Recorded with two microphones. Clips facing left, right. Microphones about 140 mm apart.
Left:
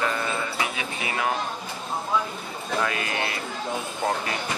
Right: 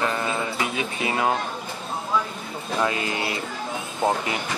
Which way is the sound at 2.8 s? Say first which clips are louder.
Right 4 dB; 25° right (ahead or behind).